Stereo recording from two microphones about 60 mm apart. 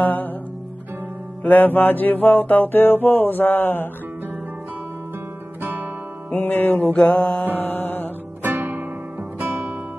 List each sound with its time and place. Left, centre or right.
0.0 s music: left
1.4 s mantra: left
5.6 s guitar: right
6.3 s music: left
7.0 s music: centre
7.5 s music: left
8.4 s music: right